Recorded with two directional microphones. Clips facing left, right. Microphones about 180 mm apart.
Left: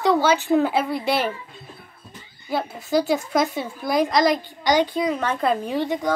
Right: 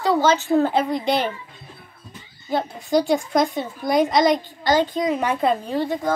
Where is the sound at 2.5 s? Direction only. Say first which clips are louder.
Right 2 dB; 5° left (ahead or behind).